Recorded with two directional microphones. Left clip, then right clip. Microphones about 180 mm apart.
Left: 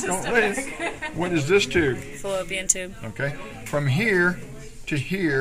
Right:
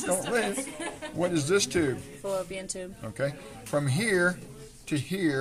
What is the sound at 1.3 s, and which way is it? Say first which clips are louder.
Speech: left 7 dB; 45° right (ahead or behind).